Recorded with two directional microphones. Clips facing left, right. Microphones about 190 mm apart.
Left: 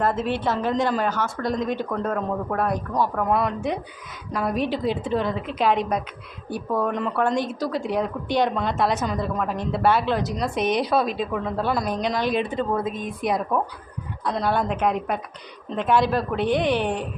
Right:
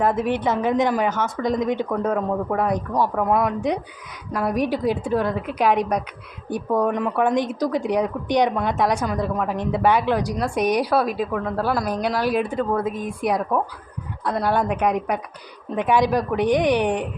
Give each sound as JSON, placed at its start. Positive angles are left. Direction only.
{"t": 0.0, "sound": "speech", "side_deg": -15}